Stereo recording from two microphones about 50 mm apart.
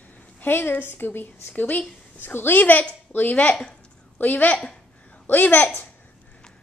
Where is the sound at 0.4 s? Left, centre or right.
Left.